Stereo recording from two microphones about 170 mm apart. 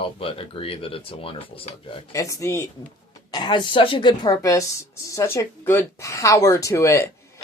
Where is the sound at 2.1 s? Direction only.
20° left (ahead or behind).